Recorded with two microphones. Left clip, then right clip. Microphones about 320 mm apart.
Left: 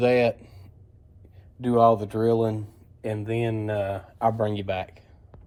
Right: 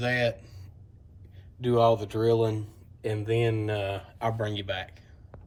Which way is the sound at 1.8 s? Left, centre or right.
Centre.